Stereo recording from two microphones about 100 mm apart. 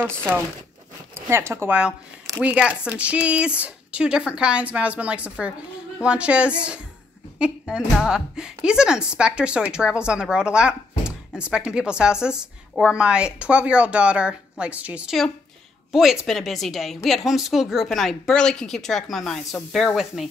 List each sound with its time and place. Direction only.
1.1 s speech: 25° right (ahead or behind)
2.4 s a woman's voice: 10° right (ahead or behind)
15.9 s a woman's voice: 5° right (ahead or behind)